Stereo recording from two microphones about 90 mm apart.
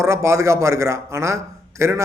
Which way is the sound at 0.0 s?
30° right (ahead or behind).